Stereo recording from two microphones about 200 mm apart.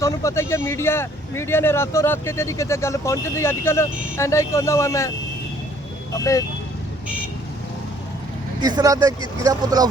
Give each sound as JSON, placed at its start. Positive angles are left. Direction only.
{"t": 0.0, "sound": "speech", "side_deg": 15}
{"t": 6.1, "sound": "speech", "side_deg": 15}
{"t": 8.6, "sound": "speech", "side_deg": -20}